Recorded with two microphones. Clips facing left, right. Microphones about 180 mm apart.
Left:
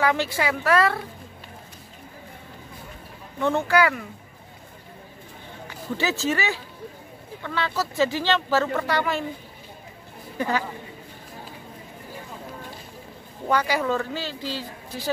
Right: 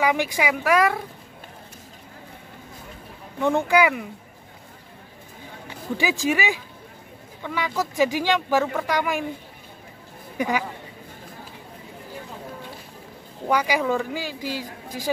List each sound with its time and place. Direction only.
0.0 s speech: 15° right (ahead or behind)
3.3 s speech: 15° right (ahead or behind)
5.9 s speech: 15° right (ahead or behind)
10.3 s a woman's voice: 15° right (ahead or behind)
13.5 s speech: 10° right (ahead or behind)